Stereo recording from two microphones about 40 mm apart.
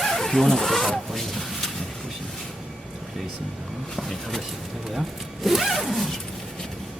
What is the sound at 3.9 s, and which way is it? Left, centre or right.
Speech, centre.